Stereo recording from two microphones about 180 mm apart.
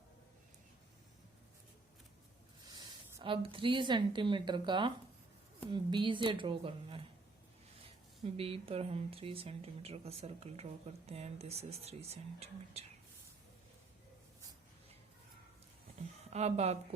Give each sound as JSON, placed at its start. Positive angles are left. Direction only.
{"t": 3.2, "sound": "a woman's voice", "side_deg": -30}
{"t": 8.2, "sound": "speech", "side_deg": -30}
{"t": 16.3, "sound": "speech", "side_deg": -35}